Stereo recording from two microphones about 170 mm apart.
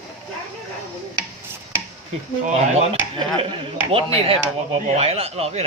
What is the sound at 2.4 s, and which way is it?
Speech, 40° right (ahead or behind).